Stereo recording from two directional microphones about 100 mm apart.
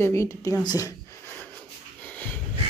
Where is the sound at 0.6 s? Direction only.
45° left (ahead or behind).